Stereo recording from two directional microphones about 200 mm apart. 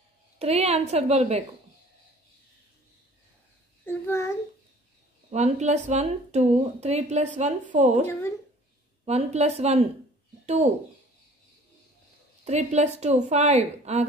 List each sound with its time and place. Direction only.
0.4 s a woman's voice: 30° right (ahead or behind)
3.8 s a child's voice: 15° left (ahead or behind)
5.3 s speech: 35° right (ahead or behind)
12.4 s speech: 35° right (ahead or behind)